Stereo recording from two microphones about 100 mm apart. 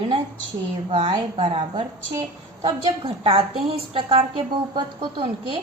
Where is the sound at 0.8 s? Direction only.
65° right (ahead or behind).